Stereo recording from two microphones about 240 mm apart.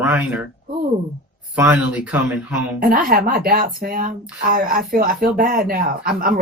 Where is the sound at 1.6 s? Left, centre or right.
Centre.